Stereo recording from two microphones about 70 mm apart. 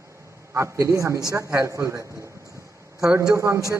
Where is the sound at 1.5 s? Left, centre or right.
Right.